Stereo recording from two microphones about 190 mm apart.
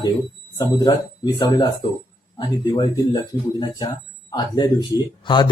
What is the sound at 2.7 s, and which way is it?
Speech, 20° left (ahead or behind).